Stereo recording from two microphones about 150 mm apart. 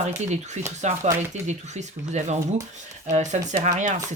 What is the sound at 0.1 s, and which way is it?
Speech, 50° right (ahead or behind).